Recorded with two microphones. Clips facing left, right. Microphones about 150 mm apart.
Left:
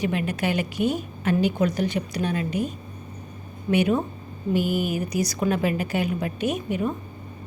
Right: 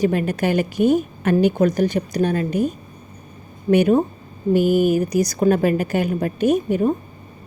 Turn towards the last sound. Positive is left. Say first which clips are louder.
# right 8 dB
turn(degrees=-40)  # may be behind; listen again after turning